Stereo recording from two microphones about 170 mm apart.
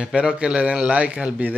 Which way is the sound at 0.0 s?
5° right (ahead or behind).